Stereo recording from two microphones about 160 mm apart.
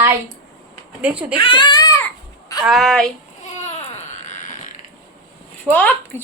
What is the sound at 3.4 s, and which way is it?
Baby cry, 45° left (ahead or behind).